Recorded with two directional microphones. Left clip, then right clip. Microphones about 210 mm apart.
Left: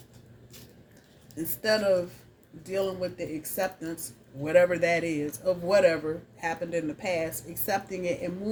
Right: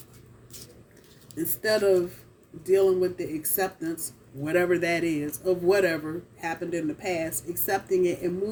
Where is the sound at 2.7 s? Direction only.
20° left (ahead or behind).